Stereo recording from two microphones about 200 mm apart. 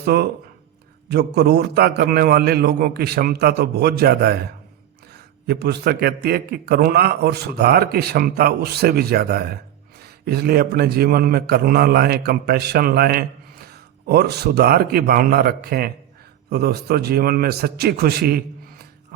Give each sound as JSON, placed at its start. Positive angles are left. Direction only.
{"t": 0.0, "sound": "a man's voice", "side_deg": -55}
{"t": 5.5, "sound": "a man's voice", "side_deg": -55}